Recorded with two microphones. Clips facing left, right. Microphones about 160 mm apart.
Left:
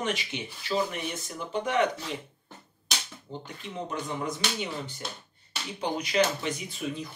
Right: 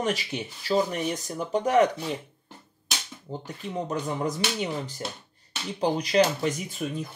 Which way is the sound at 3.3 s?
35° right (ahead or behind).